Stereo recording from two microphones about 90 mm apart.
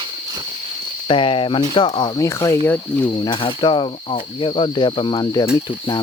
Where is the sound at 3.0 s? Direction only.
60° left (ahead or behind).